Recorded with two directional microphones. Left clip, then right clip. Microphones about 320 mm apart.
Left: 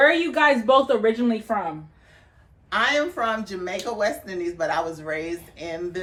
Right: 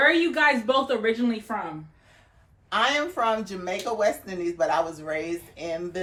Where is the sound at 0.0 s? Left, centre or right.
Centre.